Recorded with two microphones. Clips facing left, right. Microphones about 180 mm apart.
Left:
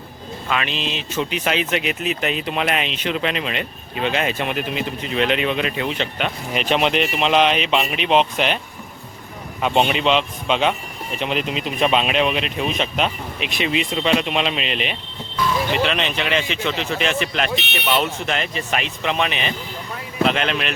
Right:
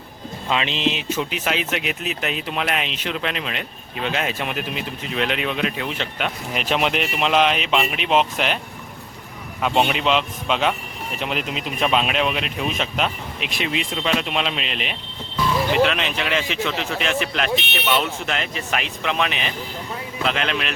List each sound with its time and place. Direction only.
0.4 s speech: 20° right (ahead or behind)
1.2 s speech: 5° right (ahead or behind)
9.6 s speech: centre (ahead or behind)